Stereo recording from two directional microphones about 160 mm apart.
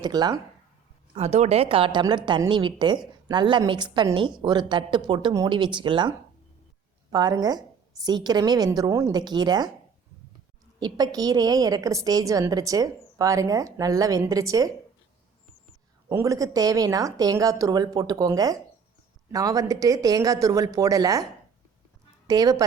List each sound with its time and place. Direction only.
0.0 s a woman's voice: 25° right (ahead or behind)
1.1 s a woman's voice: 40° right (ahead or behind); by 9.6 s 25° right (ahead or behind)
10.8 s a woman's voice: 25° right (ahead or behind)
16.0 s a woman's voice: 20° right (ahead or behind)
22.3 s a woman's voice: 25° right (ahead or behind)